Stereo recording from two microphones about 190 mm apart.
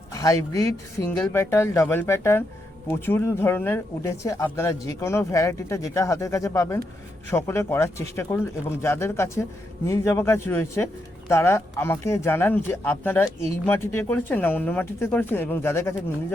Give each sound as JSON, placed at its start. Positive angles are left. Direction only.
{"t": 0.1, "sound": "speech", "side_deg": 15}